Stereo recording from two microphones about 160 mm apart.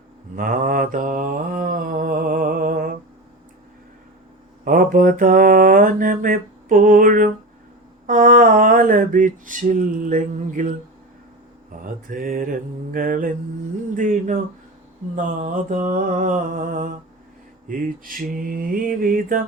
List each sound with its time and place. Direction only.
0.3 s mantra: 60° right (ahead or behind)
4.6 s mantra: 60° right (ahead or behind)
8.0 s a sound: 60° right (ahead or behind)
11.8 s mantra: 60° right (ahead or behind)